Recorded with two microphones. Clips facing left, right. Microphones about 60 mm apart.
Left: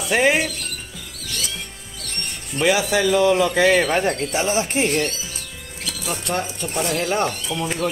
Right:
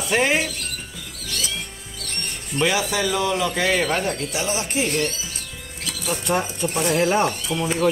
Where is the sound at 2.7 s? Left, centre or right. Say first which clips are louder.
Left 4 dB; left.